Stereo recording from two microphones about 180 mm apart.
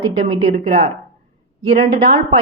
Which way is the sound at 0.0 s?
30° right (ahead or behind).